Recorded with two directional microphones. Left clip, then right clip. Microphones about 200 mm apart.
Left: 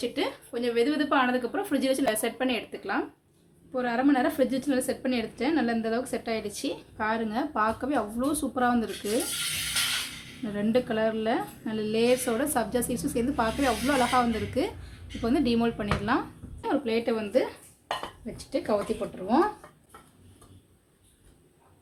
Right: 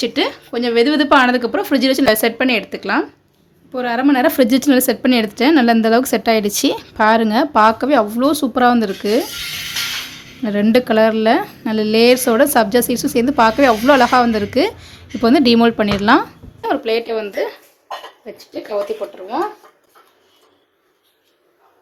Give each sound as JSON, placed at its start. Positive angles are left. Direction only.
{"t": 0.0, "sound": "a woman's voice", "side_deg": -50}
{"t": 3.7, "sound": "a woman's voice", "side_deg": -25}
{"t": 4.4, "sound": "a woman's voice", "side_deg": -50}
{"t": 10.4, "sound": "a woman's voice", "side_deg": -40}
{"t": 18.9, "sound": "speech", "side_deg": -10}